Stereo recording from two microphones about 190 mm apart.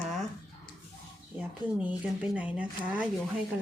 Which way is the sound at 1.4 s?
5° right (ahead or behind).